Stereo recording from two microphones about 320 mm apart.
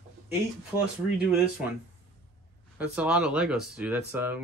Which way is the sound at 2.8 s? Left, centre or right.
Centre.